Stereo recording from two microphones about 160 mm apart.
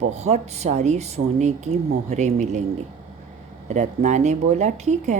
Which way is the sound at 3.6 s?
50° right (ahead or behind).